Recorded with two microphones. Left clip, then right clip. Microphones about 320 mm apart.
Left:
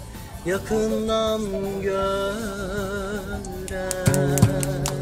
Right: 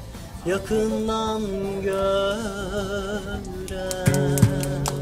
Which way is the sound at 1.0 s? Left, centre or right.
Centre.